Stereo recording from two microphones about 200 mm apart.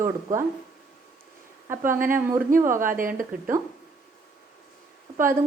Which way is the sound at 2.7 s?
45° right (ahead or behind).